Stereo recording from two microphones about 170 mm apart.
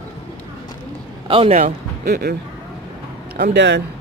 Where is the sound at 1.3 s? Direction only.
35° right (ahead or behind).